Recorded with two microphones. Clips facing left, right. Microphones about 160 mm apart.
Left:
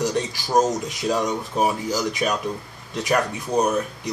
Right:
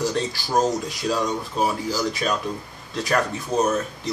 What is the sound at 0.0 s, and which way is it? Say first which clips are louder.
Speech: left 1 dB; 15° left (ahead or behind).